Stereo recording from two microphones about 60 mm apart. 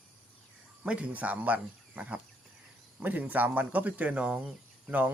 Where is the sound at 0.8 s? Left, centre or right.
Centre.